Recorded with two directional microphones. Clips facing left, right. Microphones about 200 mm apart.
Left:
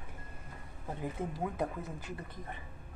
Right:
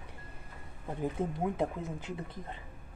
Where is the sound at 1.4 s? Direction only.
20° right (ahead or behind).